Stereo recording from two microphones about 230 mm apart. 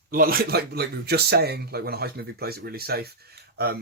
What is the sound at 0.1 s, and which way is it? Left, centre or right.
Speech, right.